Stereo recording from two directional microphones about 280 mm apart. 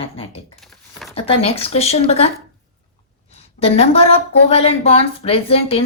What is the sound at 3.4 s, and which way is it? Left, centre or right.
A woman's voice, left.